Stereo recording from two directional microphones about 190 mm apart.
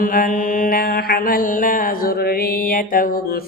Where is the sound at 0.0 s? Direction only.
45° left (ahead or behind).